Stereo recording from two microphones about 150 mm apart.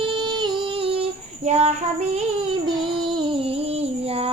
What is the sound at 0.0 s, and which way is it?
Music, 35° right (ahead or behind).